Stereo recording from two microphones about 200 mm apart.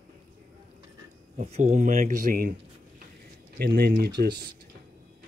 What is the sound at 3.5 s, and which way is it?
Speech, 50° right (ahead or behind).